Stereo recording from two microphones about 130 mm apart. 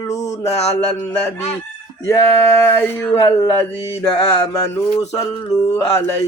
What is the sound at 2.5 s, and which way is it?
Music, 20° left (ahead or behind).